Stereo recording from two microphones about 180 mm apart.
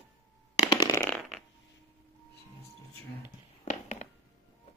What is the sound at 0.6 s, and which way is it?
Fart, 25° left (ahead or behind).